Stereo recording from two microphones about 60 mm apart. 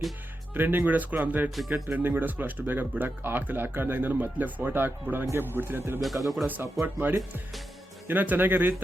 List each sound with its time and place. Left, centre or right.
0.5 s speech: right
1.5 s speech: centre
1.7 s speech: right
6.2 s speech: centre
6.8 s speech: right